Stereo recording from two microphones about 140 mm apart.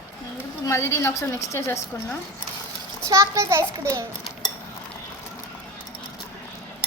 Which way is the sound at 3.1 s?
20° right (ahead or behind).